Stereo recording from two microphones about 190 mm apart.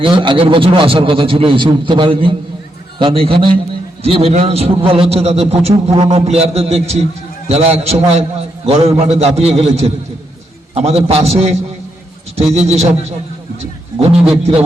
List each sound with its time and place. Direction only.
0.0 s a man's voice: 25° right (ahead or behind)